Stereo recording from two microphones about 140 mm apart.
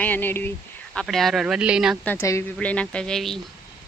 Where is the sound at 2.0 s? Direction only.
20° left (ahead or behind).